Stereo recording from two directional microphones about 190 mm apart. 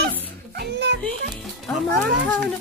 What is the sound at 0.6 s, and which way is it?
Speech, 65° right (ahead or behind).